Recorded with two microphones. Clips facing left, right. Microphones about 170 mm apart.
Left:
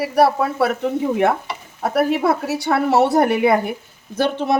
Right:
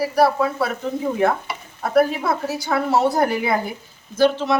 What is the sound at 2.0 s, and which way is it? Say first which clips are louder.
A woman's voice: left 5 dB; 70° left (ahead or behind).